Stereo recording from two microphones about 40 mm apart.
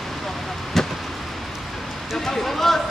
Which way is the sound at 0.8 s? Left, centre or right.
Centre.